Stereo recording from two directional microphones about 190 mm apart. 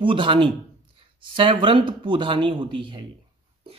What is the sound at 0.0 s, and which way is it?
Speech, 25° right (ahead or behind).